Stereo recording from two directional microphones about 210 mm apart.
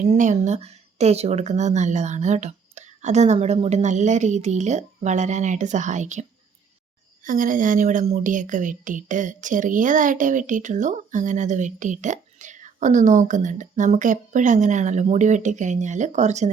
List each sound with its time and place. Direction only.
0.0 s a woman's voice: 35° right (ahead or behind)